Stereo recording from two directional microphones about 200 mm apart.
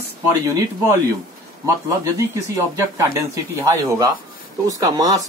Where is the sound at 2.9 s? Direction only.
15° right (ahead or behind).